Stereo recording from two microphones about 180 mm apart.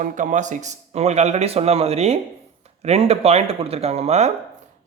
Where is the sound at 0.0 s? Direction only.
45° right (ahead or behind).